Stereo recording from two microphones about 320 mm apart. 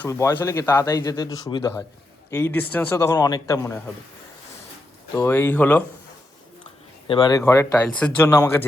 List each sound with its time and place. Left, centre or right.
0.0 s speech: centre
5.1 s speech: centre
7.1 s speech: centre